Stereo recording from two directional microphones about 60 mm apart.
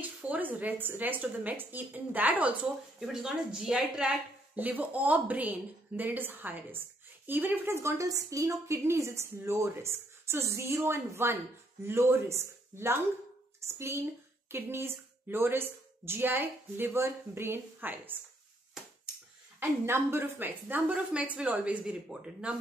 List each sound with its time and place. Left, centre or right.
0.0 s a woman's voice: right
3.0 s speech: centre
4.6 s a woman's voice: right
7.7 s a woman's voice: right
8.1 s a woman's voice: right
19.9 s a woman's voice: right; by 22.6 s centre